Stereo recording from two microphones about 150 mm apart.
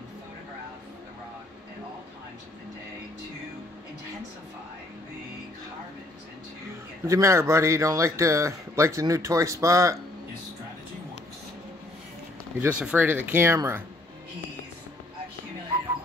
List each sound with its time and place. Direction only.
7.1 s speech: 20° right (ahead or behind)
12.5 s speech: 10° right (ahead or behind)